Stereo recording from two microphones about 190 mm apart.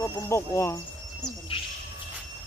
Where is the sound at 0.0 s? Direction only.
15° left (ahead or behind).